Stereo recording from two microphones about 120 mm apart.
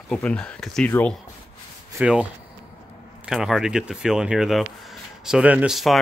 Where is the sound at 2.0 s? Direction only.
5° right (ahead or behind).